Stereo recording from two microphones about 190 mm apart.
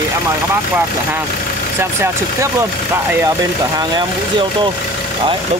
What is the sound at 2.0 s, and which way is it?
Speech, 15° right (ahead or behind).